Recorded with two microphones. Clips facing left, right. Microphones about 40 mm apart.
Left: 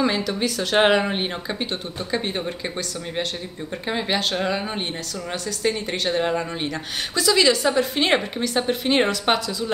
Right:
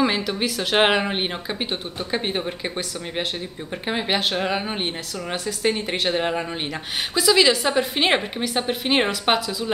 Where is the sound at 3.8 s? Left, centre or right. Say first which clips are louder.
Right 1 dB; centre.